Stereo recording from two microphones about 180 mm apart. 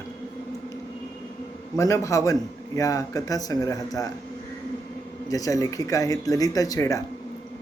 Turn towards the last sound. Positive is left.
turn(degrees=15)  # may be behind; listen again after turning